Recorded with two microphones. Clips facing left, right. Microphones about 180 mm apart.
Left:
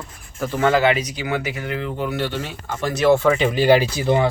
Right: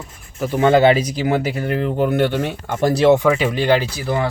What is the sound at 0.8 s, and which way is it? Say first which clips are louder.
Speech: right 5 dB; 30° right (ahead or behind).